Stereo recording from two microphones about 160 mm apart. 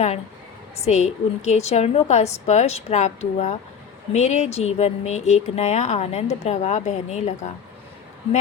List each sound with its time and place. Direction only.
0.9 s speech: 45° left (ahead or behind)